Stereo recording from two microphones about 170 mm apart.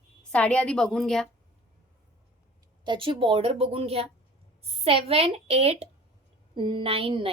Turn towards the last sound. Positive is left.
turn(degrees=-30)  # may be behind; listen again after turning